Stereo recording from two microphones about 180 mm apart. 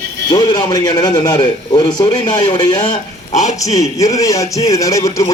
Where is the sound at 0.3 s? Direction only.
25° left (ahead or behind).